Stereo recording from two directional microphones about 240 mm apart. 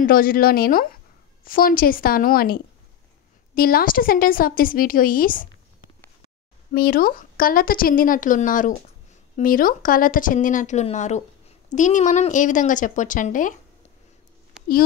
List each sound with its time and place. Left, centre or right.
0.0 s speech: left